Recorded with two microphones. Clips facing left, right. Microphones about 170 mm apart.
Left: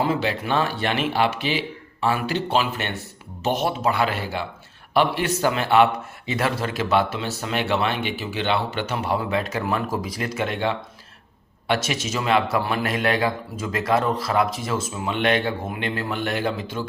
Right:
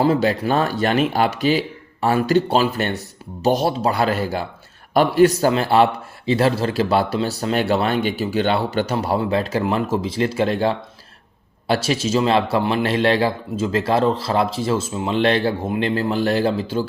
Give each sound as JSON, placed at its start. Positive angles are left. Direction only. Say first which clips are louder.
{"t": 0.0, "sound": "a man's voice", "louder": "right 6 dB", "side_deg": -40}